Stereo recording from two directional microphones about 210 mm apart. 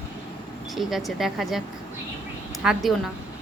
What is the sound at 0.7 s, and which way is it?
Speech, centre (ahead or behind).